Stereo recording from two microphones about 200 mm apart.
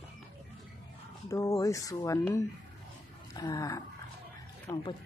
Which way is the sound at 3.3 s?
20° left (ahead or behind).